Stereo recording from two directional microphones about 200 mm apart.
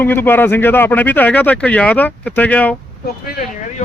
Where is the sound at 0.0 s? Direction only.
10° left (ahead or behind).